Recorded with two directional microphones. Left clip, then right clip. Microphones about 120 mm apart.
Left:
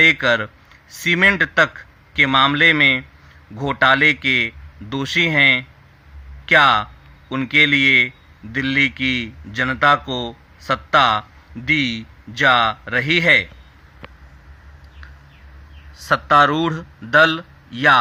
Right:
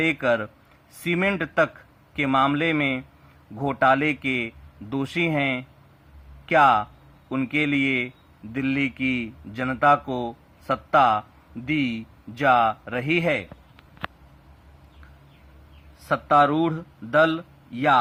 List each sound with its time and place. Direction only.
0.0 s a man's voice: 15° left (ahead or behind)
16.0 s a man's voice: 15° left (ahead or behind)